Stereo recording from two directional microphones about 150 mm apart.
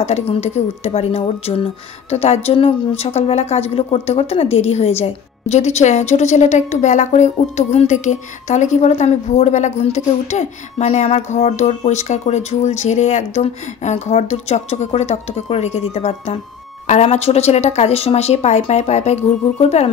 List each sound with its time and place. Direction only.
0.0 s speech: 45° left (ahead or behind)